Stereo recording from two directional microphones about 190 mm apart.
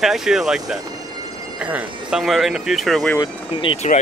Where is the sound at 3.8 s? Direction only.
35° left (ahead or behind).